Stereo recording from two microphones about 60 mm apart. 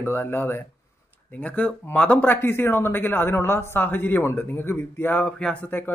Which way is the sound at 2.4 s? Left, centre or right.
Left.